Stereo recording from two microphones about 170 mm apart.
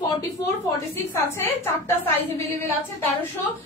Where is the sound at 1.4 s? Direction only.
15° left (ahead or behind).